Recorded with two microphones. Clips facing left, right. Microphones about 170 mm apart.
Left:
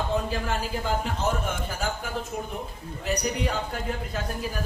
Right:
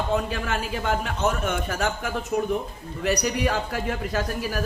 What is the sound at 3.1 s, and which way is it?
Speech, 80° right.